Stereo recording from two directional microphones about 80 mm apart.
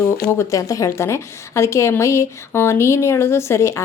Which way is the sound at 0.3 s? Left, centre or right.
Left.